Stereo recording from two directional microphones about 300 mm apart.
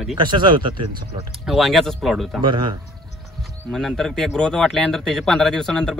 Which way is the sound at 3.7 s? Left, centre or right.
Centre.